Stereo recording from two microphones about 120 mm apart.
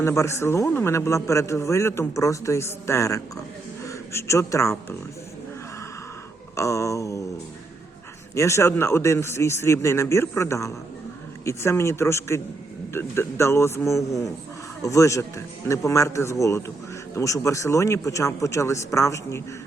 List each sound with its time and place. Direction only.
0.0 s a man's voice: 25° left (ahead or behind)
6.6 s a man's voice: 25° left (ahead or behind)
8.4 s a man's voice: 25° left (ahead or behind)